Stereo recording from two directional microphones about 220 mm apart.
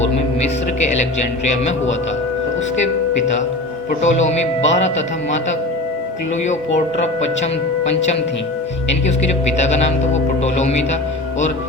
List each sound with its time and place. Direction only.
0.0 s speech: 30° left (ahead or behind)
6.7 s speech: 30° left (ahead or behind)
9.6 s speech: 30° left (ahead or behind)